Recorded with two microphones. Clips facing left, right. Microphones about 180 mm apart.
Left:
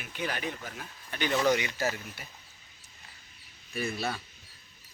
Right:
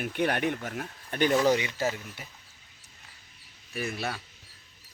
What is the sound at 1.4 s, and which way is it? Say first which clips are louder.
Speech: right 2 dB; 25° right (ahead or behind).